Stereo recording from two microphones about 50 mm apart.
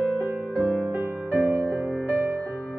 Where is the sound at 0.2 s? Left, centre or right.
Right.